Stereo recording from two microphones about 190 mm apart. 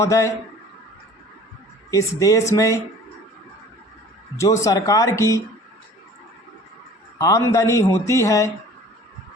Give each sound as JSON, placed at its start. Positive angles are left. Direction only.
{"t": 0.0, "sound": "a man's voice", "side_deg": 15}
{"t": 1.9, "sound": "a man's voice", "side_deg": 15}
{"t": 4.4, "sound": "a man's voice", "side_deg": 15}
{"t": 7.2, "sound": "a man's voice", "side_deg": 15}